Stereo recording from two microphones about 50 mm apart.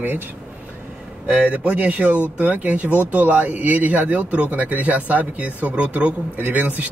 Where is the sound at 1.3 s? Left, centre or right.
Right.